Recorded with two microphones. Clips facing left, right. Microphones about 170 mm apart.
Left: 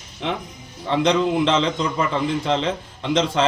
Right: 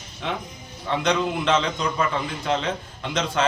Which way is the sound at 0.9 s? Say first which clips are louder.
Left 4 dB; 30° left (ahead or behind).